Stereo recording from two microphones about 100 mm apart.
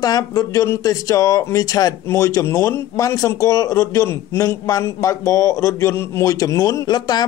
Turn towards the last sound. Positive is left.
turn(degrees=45)  # may be behind; listen again after turning